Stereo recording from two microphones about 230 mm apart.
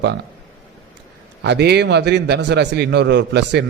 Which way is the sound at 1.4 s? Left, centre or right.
Right.